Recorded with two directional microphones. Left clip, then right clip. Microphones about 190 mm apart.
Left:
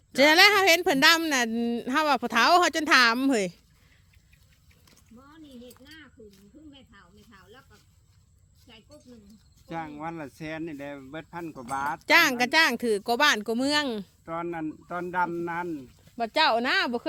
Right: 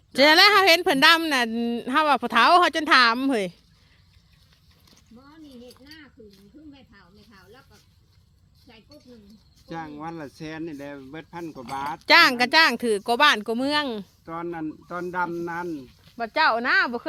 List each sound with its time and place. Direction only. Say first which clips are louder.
0.1 s speech: right 3 dB; 10° left (ahead or behind)
4.9 s a sound: right 2 dB; centre (ahead or behind)
6.0 s snake: right 2 dB; centre (ahead or behind)
8.6 s speech: right 1 dB; centre (ahead or behind)
16.1 s speech: right 2 dB; 30° left (ahead or behind)